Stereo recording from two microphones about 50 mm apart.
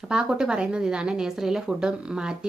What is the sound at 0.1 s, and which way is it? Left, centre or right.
A woman's voice, centre.